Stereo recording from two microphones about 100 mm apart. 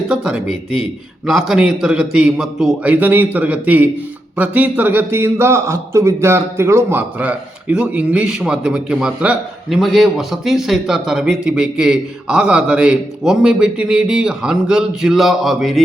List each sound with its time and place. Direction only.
0.1 s a man's voice: 5° right (ahead or behind)
2.9 s a man's voice: 20° right (ahead or behind)
7.2 s a man's voice: 10° right (ahead or behind)